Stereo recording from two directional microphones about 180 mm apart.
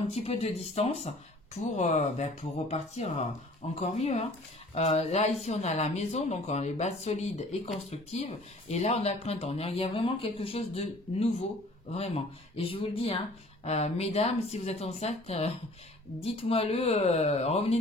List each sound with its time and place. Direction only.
0.1 s speech: 35° left (ahead or behind)